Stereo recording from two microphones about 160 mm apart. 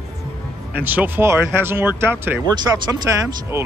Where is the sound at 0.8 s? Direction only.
10° right (ahead or behind).